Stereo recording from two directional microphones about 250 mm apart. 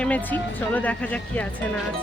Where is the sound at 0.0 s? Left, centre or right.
Centre.